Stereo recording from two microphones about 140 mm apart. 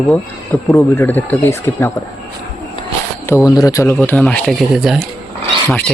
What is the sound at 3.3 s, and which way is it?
Speech, 25° left (ahead or behind).